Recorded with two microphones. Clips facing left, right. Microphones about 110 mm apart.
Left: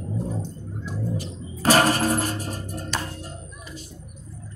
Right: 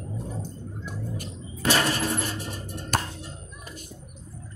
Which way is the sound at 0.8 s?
50° right (ahead or behind).